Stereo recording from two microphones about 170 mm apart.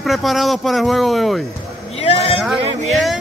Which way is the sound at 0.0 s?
Centre (ahead or behind).